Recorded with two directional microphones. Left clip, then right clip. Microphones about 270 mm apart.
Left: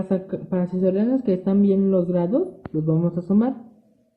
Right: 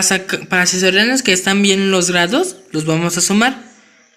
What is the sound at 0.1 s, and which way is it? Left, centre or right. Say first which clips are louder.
Speech: right 9 dB; right.